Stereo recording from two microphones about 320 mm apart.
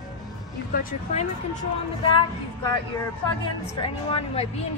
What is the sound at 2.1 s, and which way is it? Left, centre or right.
Speech, centre.